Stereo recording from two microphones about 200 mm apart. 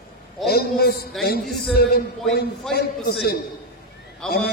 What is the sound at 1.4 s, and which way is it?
A man's voice, centre (ahead or behind).